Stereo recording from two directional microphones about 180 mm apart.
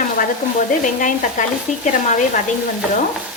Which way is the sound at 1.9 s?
45° left (ahead or behind).